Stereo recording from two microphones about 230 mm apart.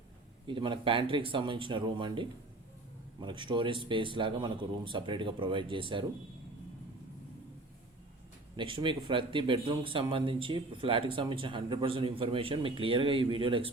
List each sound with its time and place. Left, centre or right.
0.4 s speech: right
8.5 s speech: right